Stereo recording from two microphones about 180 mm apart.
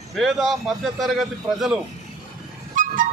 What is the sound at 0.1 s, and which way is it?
A man's voice, centre (ahead or behind).